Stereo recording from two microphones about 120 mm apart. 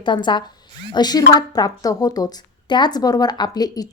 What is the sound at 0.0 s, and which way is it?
A woman's voice, 40° left (ahead or behind).